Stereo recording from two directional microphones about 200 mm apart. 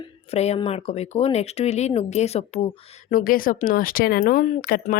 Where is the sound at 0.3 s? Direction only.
30° left (ahead or behind).